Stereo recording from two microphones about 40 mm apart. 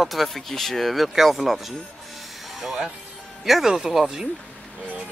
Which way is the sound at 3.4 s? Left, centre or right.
Centre.